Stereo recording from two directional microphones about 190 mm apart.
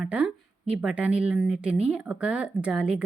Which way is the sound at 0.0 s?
5° right (ahead or behind).